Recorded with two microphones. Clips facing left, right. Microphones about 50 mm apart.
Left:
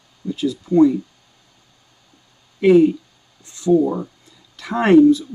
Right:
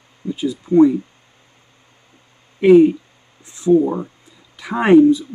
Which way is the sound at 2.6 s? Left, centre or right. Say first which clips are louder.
Right 3 dB; centre.